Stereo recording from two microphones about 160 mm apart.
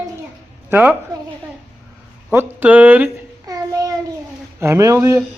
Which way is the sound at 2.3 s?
10° right (ahead or behind).